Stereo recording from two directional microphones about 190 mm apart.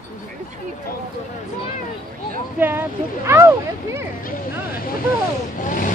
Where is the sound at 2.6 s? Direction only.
10° right (ahead or behind).